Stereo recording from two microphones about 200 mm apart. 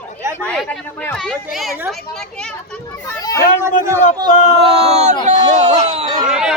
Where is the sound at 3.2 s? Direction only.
15° left (ahead or behind).